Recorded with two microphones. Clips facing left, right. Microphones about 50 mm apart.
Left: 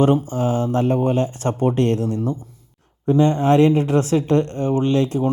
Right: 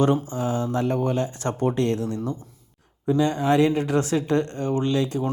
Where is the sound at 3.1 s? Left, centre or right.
Left.